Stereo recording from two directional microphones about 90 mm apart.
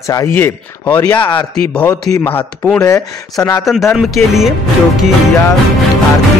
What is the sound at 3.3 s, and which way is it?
Speech, 40° left (ahead or behind).